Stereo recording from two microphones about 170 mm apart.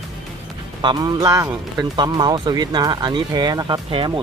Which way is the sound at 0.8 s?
25° right (ahead or behind).